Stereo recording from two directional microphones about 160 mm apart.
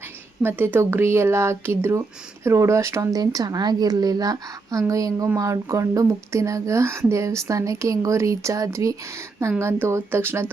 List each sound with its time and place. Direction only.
0.4 s speech: 15° right (ahead or behind)